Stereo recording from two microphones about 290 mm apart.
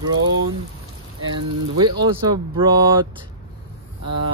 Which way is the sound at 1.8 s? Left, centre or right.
Centre.